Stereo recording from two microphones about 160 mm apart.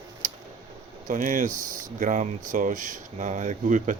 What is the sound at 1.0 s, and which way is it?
Speech, 55° right (ahead or behind).